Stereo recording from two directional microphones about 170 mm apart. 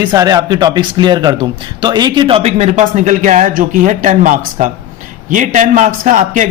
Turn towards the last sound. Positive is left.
turn(degrees=-50)  # may be behind; listen again after turning